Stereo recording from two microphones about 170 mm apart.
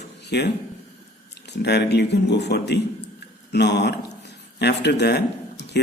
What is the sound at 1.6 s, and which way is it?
Speech, 75° left (ahead or behind).